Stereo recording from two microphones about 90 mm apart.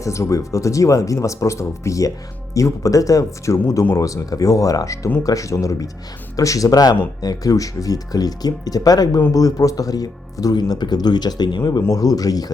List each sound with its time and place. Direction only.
0.0 s speech: 35° left (ahead or behind); by 11.8 s 55° left (ahead or behind)
11.9 s speech: 45° left (ahead or behind)